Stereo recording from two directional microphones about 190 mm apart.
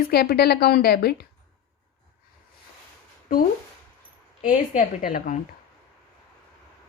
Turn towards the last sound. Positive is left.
turn(degrees=45)  # may be behind; listen again after turning